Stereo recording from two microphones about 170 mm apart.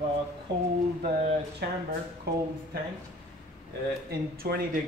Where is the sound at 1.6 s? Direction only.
75° right (ahead or behind).